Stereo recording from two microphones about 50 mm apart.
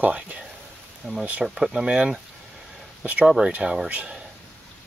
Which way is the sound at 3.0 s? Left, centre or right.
Right.